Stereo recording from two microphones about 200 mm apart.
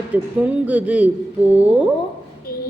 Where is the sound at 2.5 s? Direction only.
45° left (ahead or behind).